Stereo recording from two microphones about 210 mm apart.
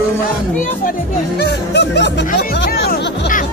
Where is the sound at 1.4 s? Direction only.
55° left (ahead or behind).